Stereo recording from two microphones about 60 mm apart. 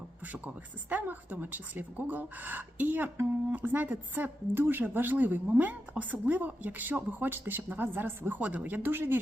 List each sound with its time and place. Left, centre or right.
0.4 s a woman's voice: right
8.4 s speech: right